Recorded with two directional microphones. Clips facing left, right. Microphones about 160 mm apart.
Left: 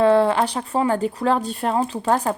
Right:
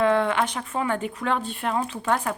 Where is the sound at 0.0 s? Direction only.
35° left (ahead or behind).